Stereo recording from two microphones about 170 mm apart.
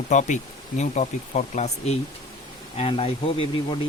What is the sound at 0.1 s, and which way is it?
Speech, 45° left (ahead or behind).